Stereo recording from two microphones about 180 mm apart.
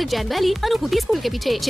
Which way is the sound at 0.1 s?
Centre (ahead or behind).